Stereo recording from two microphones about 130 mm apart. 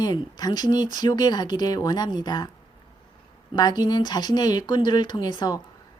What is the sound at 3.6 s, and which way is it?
A woman's voice, 30° left (ahead or behind).